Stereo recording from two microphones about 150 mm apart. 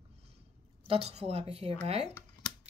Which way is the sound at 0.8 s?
40° right (ahead or behind).